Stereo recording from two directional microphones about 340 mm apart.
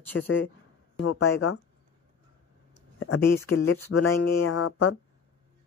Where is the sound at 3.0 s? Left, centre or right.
Left.